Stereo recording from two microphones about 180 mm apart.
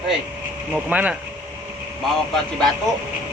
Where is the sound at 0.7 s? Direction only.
10° right (ahead or behind).